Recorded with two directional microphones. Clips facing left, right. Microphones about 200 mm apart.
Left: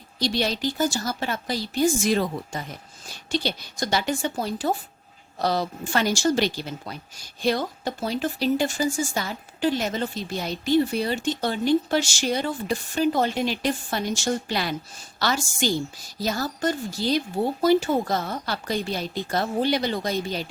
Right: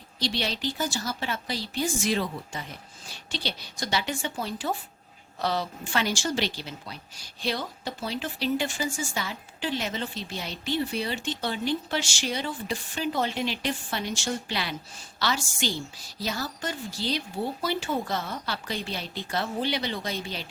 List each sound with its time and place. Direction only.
0.2 s speech: 45° left (ahead or behind)